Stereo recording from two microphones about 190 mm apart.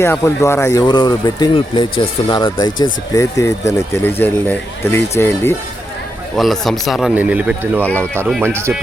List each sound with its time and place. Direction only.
0.0 s speech: 15° left (ahead or behind)
6.3 s speech: centre (ahead or behind)
7.9 s speech: 10° left (ahead or behind)
8.4 s speech: 15° right (ahead or behind)